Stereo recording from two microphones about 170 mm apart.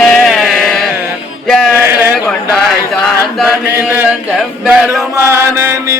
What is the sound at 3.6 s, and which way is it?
Chant, 15° right (ahead or behind).